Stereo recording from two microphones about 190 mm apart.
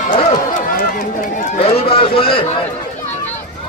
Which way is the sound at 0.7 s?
40° left (ahead or behind).